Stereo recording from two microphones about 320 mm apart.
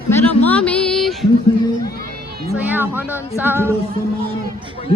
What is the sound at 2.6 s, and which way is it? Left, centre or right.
Speech, centre.